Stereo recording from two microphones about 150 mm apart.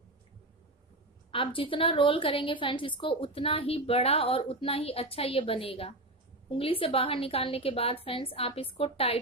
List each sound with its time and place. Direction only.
1.3 s a woman's voice: 35° left (ahead or behind)